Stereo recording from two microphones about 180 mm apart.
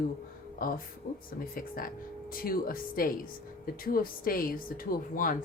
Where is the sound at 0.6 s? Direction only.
50° left (ahead or behind).